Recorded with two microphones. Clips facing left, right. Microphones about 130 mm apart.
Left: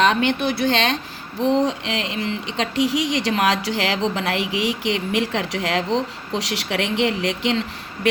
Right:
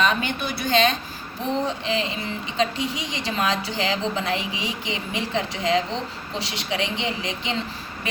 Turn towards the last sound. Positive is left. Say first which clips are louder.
# left 6 dB
turn(degrees=90)